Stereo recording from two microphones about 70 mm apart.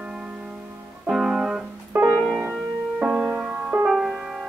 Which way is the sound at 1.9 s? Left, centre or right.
Right.